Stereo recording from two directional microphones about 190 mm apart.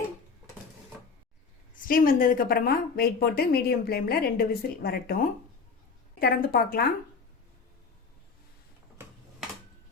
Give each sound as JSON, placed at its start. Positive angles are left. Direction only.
{"t": 1.7, "sound": "speech", "side_deg": 45}
{"t": 6.1, "sound": "speech", "side_deg": 55}